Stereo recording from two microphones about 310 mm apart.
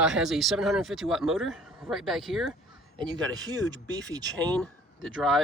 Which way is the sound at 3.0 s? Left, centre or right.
Centre.